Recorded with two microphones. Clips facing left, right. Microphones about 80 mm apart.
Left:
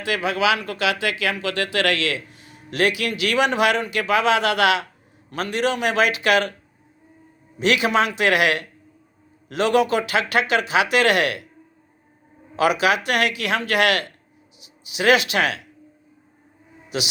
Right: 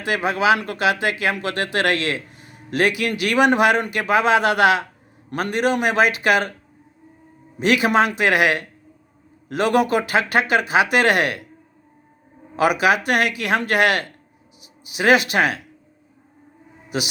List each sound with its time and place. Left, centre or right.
0.0 s a man's voice: right
7.6 s a man's voice: right
12.5 s speech: right